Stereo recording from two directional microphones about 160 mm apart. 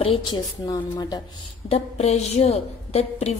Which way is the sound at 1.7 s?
45° left (ahead or behind).